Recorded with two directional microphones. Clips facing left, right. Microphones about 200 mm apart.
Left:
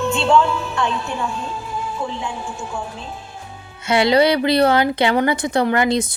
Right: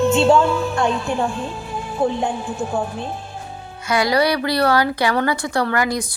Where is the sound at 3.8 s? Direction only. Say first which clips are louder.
Left 3 dB; 25° left (ahead or behind).